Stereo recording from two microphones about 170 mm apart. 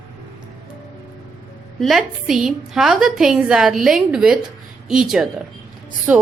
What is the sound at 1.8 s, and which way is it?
A woman's voice, centre (ahead or behind).